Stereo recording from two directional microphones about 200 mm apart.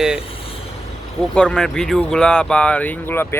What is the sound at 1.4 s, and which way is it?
Speech, 5° left (ahead or behind).